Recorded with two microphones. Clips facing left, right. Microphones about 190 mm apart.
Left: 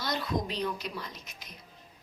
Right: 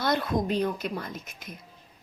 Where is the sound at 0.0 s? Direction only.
55° right (ahead or behind).